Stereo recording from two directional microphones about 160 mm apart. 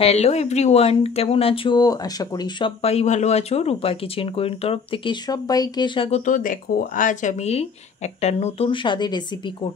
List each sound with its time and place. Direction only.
0.0 s speech: 40° left (ahead or behind)